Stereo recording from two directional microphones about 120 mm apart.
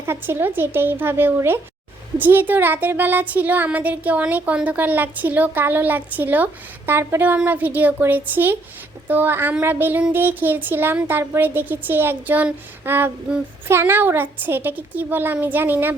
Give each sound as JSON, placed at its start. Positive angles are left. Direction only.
{"t": 0.0, "sound": "a woman's voice", "side_deg": -20}